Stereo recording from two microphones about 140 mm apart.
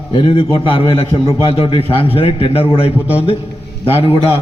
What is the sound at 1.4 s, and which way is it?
A man's voice, 40° left (ahead or behind).